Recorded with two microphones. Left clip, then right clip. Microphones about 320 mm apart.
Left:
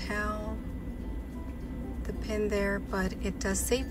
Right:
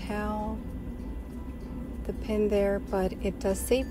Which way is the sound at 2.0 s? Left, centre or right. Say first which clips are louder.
Right 4 dB; centre.